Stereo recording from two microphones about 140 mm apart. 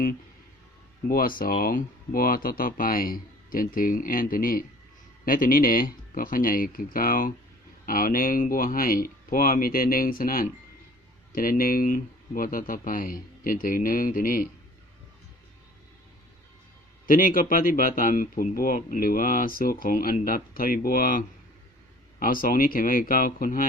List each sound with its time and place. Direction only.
1.0 s speech: 90° left
17.1 s speech: 80° left